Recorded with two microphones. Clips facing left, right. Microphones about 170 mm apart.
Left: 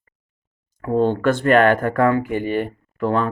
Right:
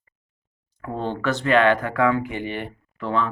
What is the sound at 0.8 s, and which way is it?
Speech, 50° left (ahead or behind).